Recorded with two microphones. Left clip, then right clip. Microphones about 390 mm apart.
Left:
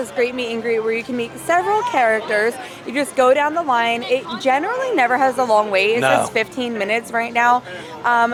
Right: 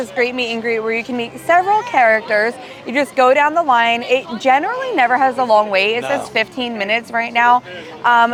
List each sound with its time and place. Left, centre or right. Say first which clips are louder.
0.2 s a woman's voice: right 3 dB; centre
6.0 s a woman's voice: left 4 dB; left
6.3 s a woman's voice: right 2 dB; centre